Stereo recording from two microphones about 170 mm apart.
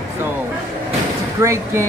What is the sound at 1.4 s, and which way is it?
Speech, 15° right (ahead or behind).